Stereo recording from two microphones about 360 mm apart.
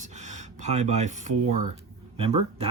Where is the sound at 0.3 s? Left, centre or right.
Centre.